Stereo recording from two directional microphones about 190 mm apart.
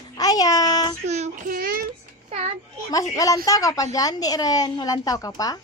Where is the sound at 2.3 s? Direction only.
35° right (ahead or behind).